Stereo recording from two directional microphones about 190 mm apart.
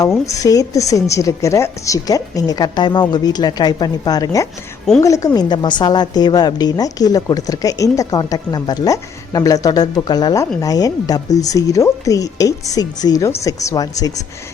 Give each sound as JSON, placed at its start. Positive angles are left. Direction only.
{"t": 0.0, "sound": "a woman's voice", "side_deg": 15}